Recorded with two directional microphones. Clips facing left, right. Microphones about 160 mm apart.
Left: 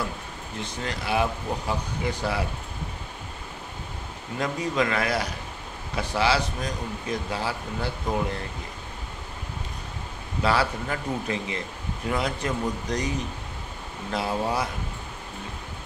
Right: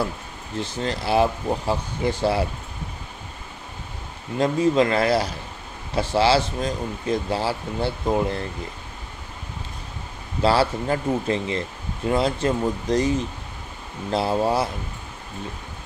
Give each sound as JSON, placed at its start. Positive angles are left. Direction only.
{"t": 0.6, "sound": "speech", "side_deg": -30}
{"t": 4.4, "sound": "speech", "side_deg": -30}
{"t": 10.4, "sound": "speech", "side_deg": -30}
{"t": 14.1, "sound": "speech", "side_deg": -30}